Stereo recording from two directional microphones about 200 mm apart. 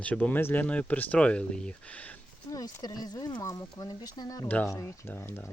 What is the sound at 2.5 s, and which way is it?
Speech, 20° left (ahead or behind).